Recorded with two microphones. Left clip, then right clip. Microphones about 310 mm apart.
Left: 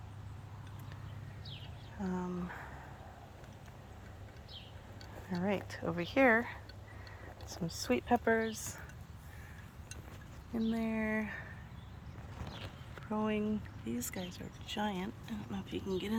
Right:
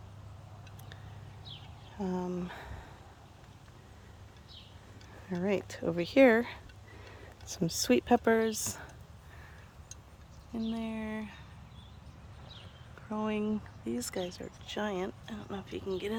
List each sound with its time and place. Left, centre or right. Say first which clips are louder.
2.0 s speech: right 5 dB; right
5.3 s speech: right 4 dB; centre
7.6 s speech: right 7 dB; right
10.5 s speech: left 1 dB; centre
13.1 s speech: right 2 dB; centre